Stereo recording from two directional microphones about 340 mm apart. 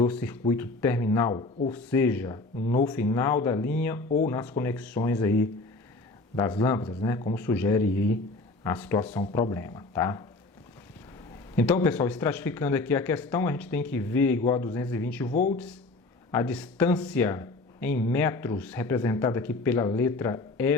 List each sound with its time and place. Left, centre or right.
0.0 s speech: centre
11.5 s speech: centre
15.3 s speech: left
16.3 s speech: centre